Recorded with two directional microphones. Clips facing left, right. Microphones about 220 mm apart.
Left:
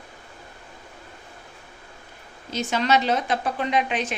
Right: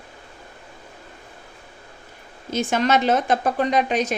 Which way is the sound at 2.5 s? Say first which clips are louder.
Right 3 dB; 50° right (ahead or behind).